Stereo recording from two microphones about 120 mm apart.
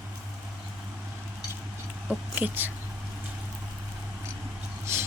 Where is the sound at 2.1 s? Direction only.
15° right (ahead or behind).